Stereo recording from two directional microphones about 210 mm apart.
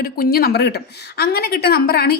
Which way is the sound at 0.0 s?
45° left (ahead or behind).